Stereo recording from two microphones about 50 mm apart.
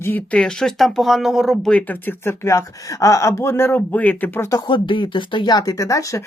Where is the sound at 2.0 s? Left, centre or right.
Left.